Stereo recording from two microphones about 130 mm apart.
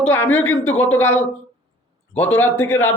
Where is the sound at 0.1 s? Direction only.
20° left (ahead or behind).